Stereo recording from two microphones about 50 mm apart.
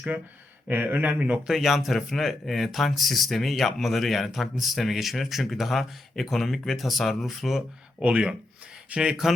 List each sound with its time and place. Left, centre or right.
0.7 s speech: right
1.5 s speech: centre
8.0 s speech: right
9.0 s speech: centre